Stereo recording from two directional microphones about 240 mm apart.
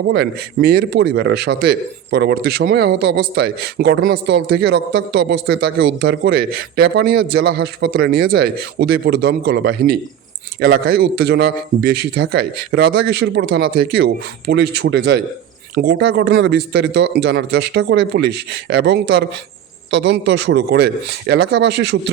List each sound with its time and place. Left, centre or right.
0.1 s speech: right